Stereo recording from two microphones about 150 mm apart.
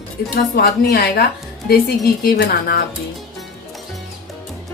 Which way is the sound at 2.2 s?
90° left.